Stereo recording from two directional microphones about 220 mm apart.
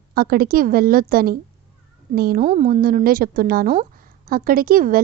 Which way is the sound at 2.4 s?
30° right (ahead or behind).